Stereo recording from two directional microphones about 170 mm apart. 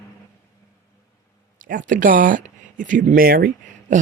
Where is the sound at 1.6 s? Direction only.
50° right (ahead or behind).